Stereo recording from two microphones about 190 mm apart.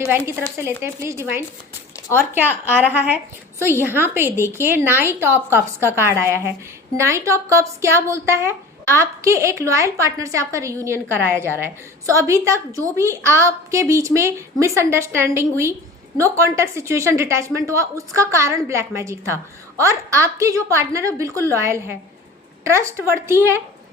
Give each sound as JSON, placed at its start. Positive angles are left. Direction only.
{"t": 0.8, "sound": "a woman's voice", "side_deg": -15}